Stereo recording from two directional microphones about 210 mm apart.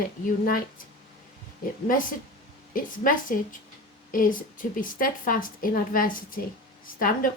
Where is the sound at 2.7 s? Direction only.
40° left (ahead or behind).